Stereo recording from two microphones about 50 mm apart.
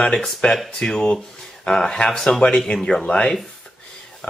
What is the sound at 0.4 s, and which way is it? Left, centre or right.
Speech, left.